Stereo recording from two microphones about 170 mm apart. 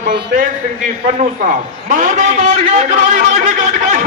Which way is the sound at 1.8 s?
50° right (ahead or behind).